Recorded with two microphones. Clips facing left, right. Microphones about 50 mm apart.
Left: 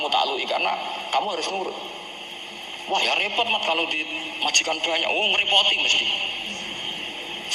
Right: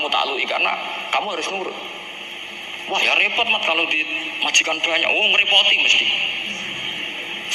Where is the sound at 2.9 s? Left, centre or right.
Right.